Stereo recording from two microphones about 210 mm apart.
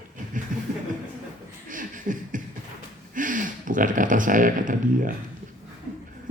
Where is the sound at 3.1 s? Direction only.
40° right (ahead or behind).